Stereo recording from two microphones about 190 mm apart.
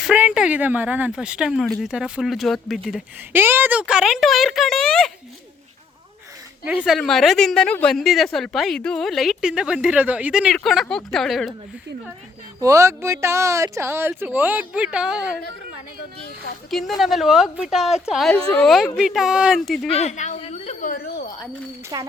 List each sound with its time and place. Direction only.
0.0 s a woman's voice: 5° right (ahead or behind)
3.3 s a woman's voice: 10° right (ahead or behind)
6.7 s a woman's voice: 5° right (ahead or behind)
12.5 s speech: 15° right (ahead or behind)
16.6 s a woman's voice: centre (ahead or behind)
19.9 s a woman's voice: 35° left (ahead or behind)
21.9 s speech: 20° right (ahead or behind)